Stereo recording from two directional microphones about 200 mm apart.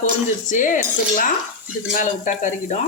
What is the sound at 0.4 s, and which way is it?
Speech, 40° left (ahead or behind).